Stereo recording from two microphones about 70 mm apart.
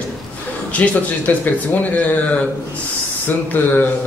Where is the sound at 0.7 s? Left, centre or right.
Left.